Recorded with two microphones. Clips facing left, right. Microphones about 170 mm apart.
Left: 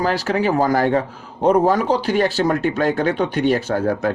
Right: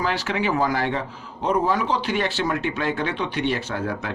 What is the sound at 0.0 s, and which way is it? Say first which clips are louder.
Speech: left 5 dB; 40° left (ahead or behind).